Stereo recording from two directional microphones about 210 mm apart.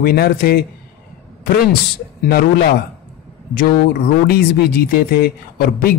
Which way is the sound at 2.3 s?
45° left (ahead or behind).